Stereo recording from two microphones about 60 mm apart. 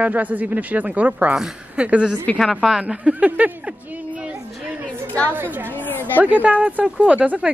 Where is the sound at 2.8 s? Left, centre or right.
Right.